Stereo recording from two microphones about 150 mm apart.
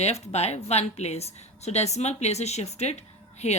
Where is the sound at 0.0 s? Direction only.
45° left (ahead or behind).